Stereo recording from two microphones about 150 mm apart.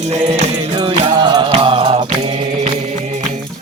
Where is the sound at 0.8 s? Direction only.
30° right (ahead or behind).